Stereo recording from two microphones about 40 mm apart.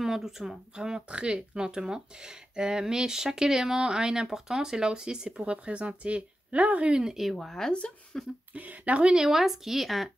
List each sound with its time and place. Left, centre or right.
0.0 s speech: centre
0.7 s speech: right
5.4 s speech: right
6.9 s speech: centre
7.2 s speech: centre
8.1 s a sound: centre
8.5 s speech: right
9.1 s speech: centre